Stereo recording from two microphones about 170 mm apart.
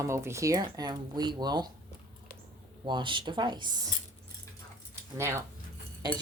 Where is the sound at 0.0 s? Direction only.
15° right (ahead or behind).